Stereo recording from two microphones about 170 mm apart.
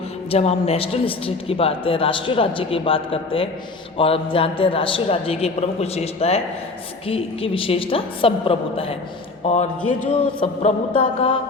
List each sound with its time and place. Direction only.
0.3 s speech: 35° left (ahead or behind)